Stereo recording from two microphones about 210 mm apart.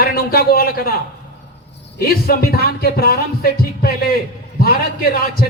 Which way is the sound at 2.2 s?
45° left (ahead or behind).